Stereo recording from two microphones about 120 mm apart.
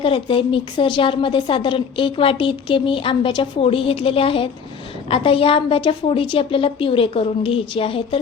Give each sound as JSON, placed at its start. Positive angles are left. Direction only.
{"t": 0.0, "sound": "a woman's voice", "side_deg": 45}